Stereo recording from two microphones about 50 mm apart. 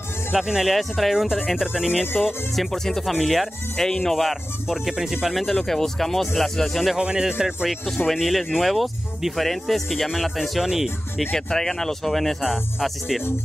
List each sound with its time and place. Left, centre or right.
0.3 s speech: centre
2.2 s speech: centre
4.2 s speech: centre
5.4 s speech: centre
7.0 s speech: centre
8.1 s speech: centre
11.3 s speech: centre